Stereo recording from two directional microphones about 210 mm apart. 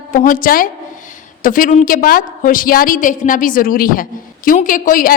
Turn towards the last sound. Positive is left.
turn(degrees=40)  # may be behind; listen again after turning